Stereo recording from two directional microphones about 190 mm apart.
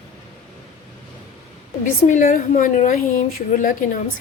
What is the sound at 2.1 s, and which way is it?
A woman's voice, 40° left (ahead or behind).